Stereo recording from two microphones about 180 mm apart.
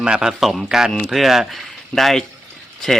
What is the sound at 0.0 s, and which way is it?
Speech, 5° right (ahead or behind).